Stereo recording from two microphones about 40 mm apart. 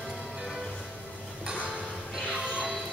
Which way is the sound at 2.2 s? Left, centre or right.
Right.